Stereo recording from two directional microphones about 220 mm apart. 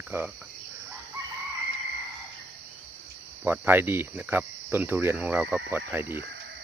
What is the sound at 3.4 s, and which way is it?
Speech, 10° right (ahead or behind).